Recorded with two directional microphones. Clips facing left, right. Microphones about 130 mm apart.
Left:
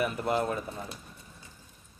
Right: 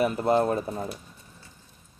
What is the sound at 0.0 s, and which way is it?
Speech, 30° right (ahead or behind).